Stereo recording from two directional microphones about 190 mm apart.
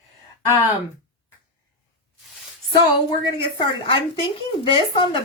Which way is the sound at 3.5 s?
25° left (ahead or behind).